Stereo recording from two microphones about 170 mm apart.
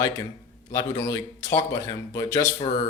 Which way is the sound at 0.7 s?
20° left (ahead or behind).